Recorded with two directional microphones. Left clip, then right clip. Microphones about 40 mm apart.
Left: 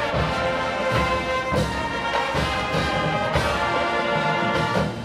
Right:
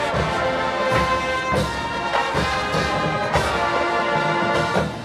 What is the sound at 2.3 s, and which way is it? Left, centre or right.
Music, right.